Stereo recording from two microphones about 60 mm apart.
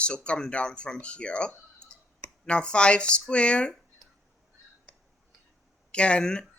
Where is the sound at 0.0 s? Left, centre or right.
Centre.